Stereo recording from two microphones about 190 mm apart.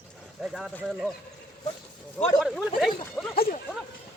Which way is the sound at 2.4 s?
Centre (ahead or behind).